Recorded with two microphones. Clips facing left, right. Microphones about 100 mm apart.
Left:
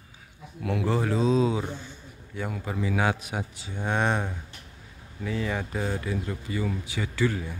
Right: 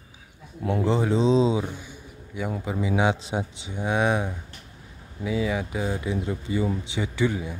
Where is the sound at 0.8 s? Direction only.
20° right (ahead or behind).